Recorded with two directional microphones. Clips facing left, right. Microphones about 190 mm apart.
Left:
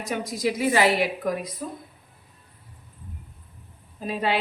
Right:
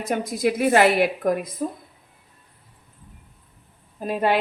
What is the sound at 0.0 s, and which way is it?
A woman's voice, 55° right (ahead or behind).